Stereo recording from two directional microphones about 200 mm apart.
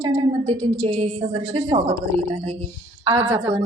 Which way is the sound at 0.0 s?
30° right (ahead or behind).